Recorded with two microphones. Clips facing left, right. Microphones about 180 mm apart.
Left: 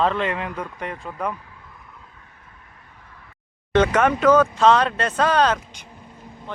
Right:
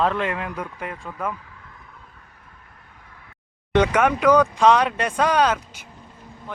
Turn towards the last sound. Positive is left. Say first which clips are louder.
# left 1 dB
turn(degrees=-10)  # may be behind; listen again after turning